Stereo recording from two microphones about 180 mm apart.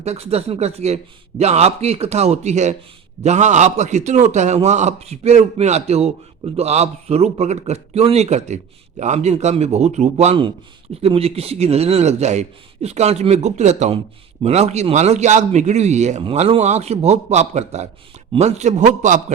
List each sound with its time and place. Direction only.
0.0 s a man's voice: 35° right (ahead or behind)